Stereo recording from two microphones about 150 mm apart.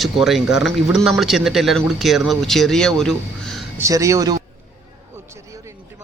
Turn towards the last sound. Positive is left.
turn(degrees=-20)  # may be behind; listen again after turning